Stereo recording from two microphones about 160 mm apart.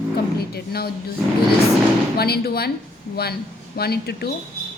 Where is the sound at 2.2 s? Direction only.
80° left.